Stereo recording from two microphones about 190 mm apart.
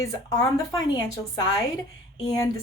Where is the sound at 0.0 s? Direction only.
15° left (ahead or behind).